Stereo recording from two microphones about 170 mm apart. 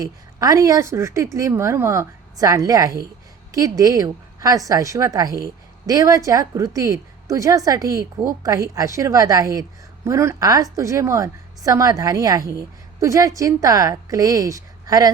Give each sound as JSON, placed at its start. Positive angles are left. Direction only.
{"t": 0.0, "sound": "a woman's voice", "side_deg": -20}